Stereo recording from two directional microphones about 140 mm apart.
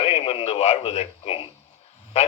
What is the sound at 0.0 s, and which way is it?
Radio, 45° left (ahead or behind).